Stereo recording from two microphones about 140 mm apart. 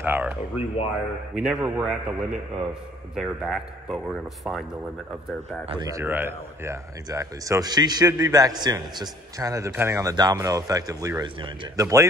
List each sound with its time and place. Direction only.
0.0 s speech: 15° right (ahead or behind)
1.3 s a man's voice: 5° right (ahead or behind)
5.9 s speech: 20° right (ahead or behind)
11.4 s speech: 35° right (ahead or behind)
11.8 s speech: 20° right (ahead or behind)